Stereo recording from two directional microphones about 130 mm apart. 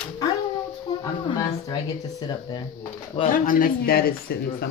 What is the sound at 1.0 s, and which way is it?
Speech, 30° left (ahead or behind).